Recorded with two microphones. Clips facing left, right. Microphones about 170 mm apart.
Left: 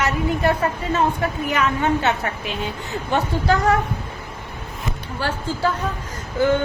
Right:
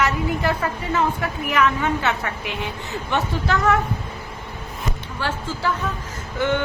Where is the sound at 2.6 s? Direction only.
25° left (ahead or behind).